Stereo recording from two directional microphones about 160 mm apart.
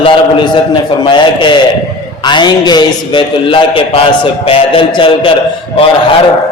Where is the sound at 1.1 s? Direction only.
30° left (ahead or behind).